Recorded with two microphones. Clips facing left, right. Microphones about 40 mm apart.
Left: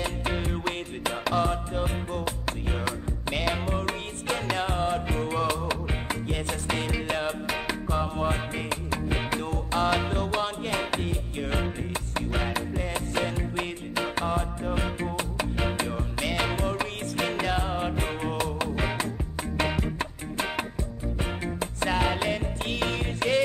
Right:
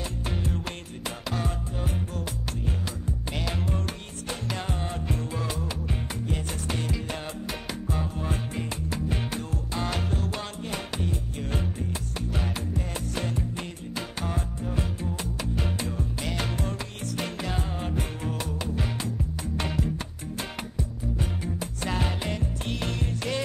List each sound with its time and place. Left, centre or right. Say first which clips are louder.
0.3 s music: left 2 dB; left
4.6 s music: left 6 dB; left
12.7 s music: left 4 dB; left
19.6 s music: left 3 dB; left
21.2 s music: left 4 dB; left